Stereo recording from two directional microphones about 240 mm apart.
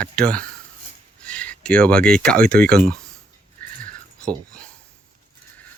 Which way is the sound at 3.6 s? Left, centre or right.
Right.